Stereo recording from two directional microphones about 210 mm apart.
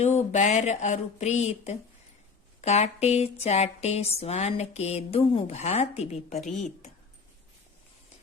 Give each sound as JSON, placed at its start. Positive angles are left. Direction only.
{"t": 0.0, "sound": "speech", "side_deg": 30}